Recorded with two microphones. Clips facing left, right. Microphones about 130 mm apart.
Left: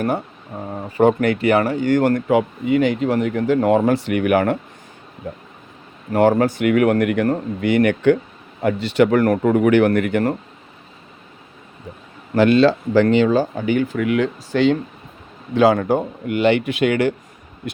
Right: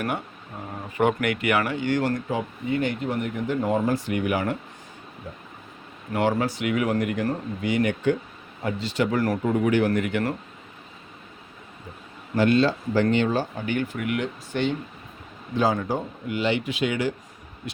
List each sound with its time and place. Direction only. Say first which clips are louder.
0.0 s speech: left 7 dB; 30° left (ahead or behind); by 4.5 s 60° left (ahead or behind)
6.1 s speech: left 8 dB; 45° left (ahead or behind)
12.3 s speech: left 7 dB; 85° left
15.5 s speech: left 8 dB; 70° left (ahead or behind)